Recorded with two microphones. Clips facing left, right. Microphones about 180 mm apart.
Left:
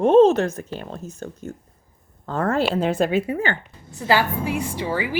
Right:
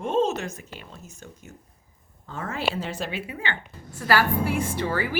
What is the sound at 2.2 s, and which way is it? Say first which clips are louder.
Speech: left 8 dB; 65° left (ahead or behind).